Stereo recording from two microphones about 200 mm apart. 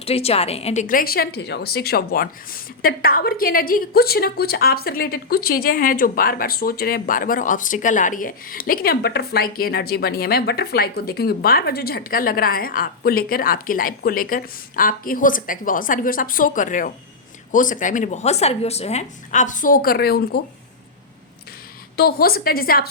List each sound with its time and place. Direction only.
0.0 s a woman's voice: 30° left (ahead or behind); by 20.4 s 50° left (ahead or behind)
21.9 s a woman's voice: 50° left (ahead or behind)